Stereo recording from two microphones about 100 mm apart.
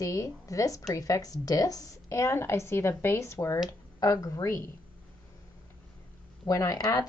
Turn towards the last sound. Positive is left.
turn(degrees=35)  # may be behind; listen again after turning